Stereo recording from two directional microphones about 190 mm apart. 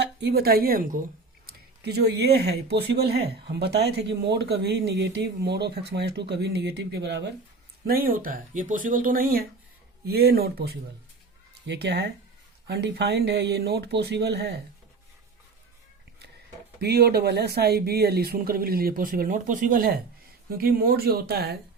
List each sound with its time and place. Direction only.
0.0 s a woman's voice: 60° right (ahead or behind); by 1.0 s 45° right (ahead or behind)
1.5 s speech: 60° right (ahead or behind)
7.9 s speech: 50° right (ahead or behind)
16.8 s speech: 55° right (ahead or behind)